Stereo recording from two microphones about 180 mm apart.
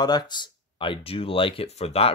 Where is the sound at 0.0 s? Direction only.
25° left (ahead or behind).